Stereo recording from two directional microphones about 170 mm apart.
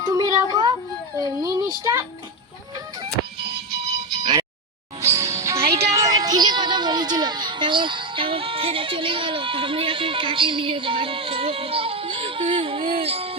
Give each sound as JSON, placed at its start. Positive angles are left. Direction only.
{"t": 0.0, "sound": "a sound", "side_deg": -20}
{"t": 1.2, "sound": "speech", "side_deg": -25}
{"t": 4.9, "sound": "music", "side_deg": -15}